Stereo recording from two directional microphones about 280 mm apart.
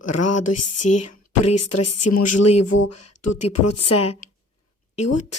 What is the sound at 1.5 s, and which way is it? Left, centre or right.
Speech, left.